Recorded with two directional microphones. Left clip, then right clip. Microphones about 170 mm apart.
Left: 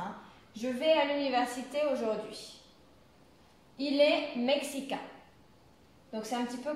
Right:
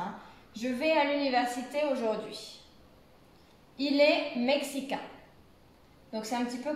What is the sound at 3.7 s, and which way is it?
Speech, 20° left (ahead or behind).